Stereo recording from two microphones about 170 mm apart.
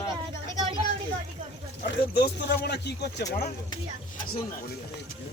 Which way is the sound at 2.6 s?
75° left (ahead or behind).